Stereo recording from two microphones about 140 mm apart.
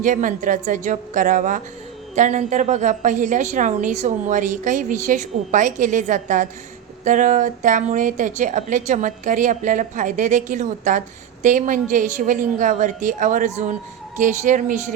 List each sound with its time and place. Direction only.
0.0 s a woman's voice: 70° right (ahead or behind)